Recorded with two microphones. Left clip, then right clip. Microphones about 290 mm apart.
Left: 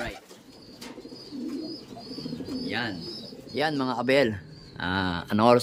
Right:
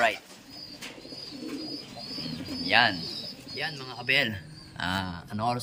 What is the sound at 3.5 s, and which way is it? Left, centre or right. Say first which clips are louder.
A man's voice: left 9 dB; left.